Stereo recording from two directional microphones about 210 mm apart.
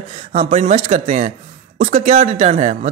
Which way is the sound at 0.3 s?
30° right (ahead or behind).